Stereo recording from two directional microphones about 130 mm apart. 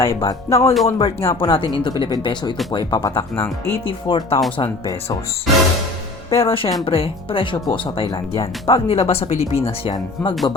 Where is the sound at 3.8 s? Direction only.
45° left (ahead or behind).